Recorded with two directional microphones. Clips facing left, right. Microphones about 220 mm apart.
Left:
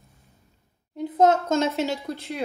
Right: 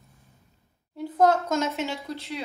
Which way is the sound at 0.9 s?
20° left (ahead or behind).